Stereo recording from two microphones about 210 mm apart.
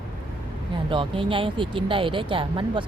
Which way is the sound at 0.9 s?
25° right (ahead or behind).